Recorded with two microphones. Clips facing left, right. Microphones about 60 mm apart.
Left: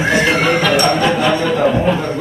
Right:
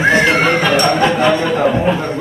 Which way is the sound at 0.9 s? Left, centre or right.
Right.